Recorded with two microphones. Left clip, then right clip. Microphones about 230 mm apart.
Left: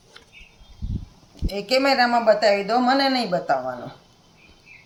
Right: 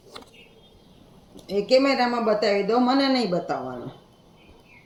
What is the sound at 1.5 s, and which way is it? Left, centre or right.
Speech, left.